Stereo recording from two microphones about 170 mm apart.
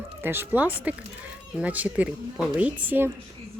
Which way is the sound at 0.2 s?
15° right (ahead or behind).